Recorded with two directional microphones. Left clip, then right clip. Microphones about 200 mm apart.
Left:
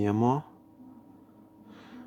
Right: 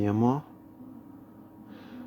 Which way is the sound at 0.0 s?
20° left (ahead or behind).